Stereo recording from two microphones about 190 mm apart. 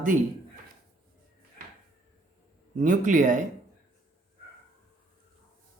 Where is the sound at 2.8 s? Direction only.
45° right (ahead or behind).